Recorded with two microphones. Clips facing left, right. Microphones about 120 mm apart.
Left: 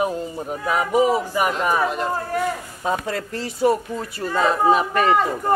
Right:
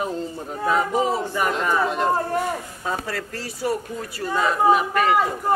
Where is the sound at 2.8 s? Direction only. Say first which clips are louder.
Left 7 dB; 20° left (ahead or behind).